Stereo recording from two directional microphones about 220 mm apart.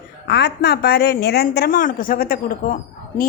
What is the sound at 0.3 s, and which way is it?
A woman's voice, 50° left (ahead or behind).